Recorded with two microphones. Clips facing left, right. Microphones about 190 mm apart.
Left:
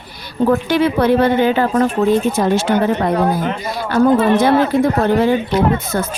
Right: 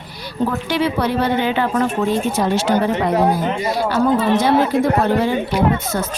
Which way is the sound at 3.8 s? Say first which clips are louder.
Left 5 dB; 55° left (ahead or behind).